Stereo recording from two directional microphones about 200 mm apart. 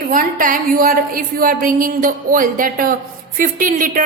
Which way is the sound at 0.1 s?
40° right (ahead or behind).